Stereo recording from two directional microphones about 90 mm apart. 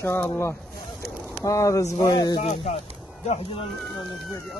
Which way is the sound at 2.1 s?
50° left (ahead or behind).